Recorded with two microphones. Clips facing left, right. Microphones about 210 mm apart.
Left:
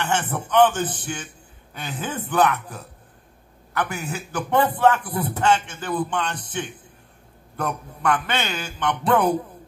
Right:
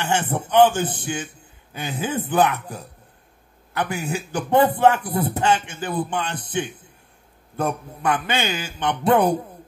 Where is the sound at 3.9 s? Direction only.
10° right (ahead or behind).